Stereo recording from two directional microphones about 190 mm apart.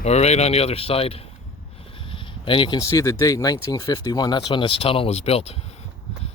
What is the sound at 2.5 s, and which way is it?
Speech, 25° left (ahead or behind).